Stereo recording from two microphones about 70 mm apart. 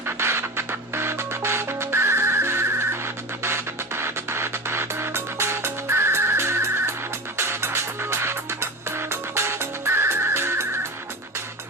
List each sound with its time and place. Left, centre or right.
0.2 s music: right